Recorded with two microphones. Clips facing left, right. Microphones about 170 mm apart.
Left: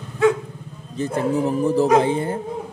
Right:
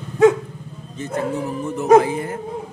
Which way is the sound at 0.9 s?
35° left (ahead or behind).